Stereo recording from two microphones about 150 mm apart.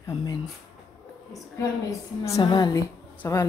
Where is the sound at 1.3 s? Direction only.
20° left (ahead or behind).